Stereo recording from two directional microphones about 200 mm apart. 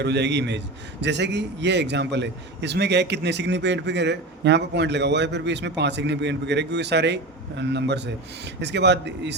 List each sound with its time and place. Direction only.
0.0 s a man's voice: 60° right (ahead or behind)